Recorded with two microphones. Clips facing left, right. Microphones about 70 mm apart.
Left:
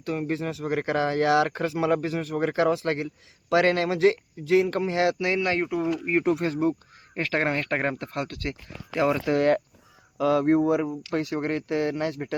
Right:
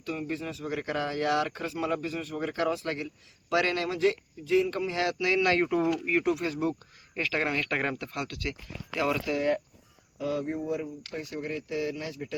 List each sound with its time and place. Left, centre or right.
0.0 s speech: left
2.3 s speech: left
3.5 s speech: left
5.6 s speech: centre
5.9 s speech: left
6.2 s speech: left
8.9 s speech: left
9.3 s speech: left